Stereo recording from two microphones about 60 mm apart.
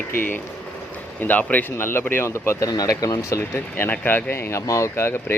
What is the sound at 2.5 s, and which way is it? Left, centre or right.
Speech, left.